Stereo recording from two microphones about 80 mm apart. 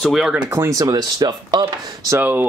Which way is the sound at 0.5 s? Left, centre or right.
Right.